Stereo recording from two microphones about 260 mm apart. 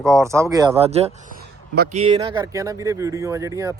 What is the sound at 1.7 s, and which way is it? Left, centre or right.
Speech, right.